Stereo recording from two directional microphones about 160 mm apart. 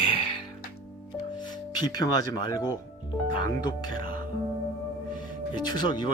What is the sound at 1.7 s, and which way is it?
Speech, 25° left (ahead or behind).